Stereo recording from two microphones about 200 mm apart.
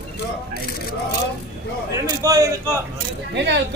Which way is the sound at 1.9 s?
15° right (ahead or behind).